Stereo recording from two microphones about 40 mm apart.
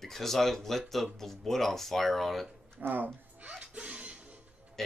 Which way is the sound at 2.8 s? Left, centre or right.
Right.